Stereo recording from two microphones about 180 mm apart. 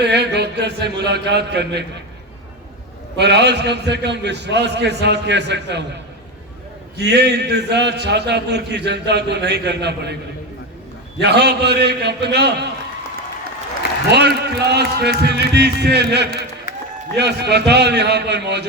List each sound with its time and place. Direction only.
0.0 s a man's voice: 70° right (ahead or behind)
3.2 s a man's voice: 70° right (ahead or behind)
7.0 s a man's voice: 70° right (ahead or behind)
11.2 s a man's voice: 70° right (ahead or behind)
14.1 s a man's voice: 65° right (ahead or behind)